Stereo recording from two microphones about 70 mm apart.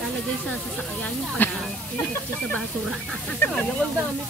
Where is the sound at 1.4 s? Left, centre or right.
Left.